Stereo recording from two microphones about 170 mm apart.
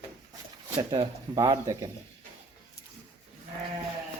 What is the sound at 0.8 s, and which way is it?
Speech, 30° right (ahead or behind).